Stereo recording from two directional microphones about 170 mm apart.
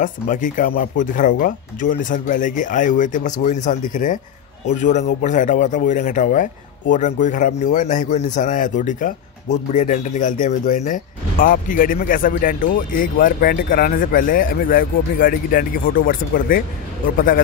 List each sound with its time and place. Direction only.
0.0 s a man's voice: 50° left (ahead or behind)